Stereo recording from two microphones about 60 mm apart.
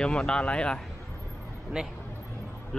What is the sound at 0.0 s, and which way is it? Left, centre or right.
Speech, centre.